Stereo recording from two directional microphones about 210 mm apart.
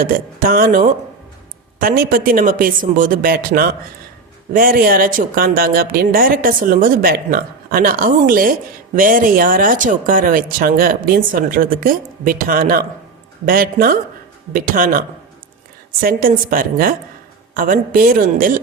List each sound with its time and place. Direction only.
0.0 s speech: 40° right (ahead or behind)